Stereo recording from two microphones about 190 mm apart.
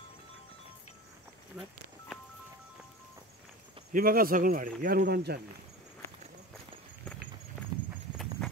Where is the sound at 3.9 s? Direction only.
50° right (ahead or behind).